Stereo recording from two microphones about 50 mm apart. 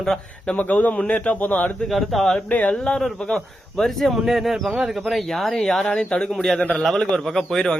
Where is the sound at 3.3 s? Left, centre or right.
Centre.